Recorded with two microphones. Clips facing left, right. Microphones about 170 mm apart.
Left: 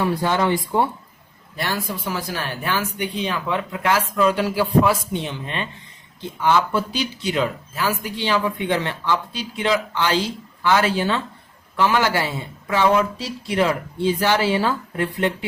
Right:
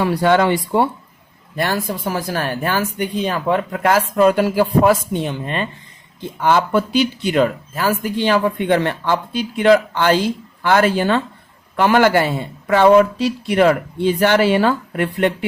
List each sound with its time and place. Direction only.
0.0 s speech: 75° right (ahead or behind)
1.5 s speech: 50° right (ahead or behind)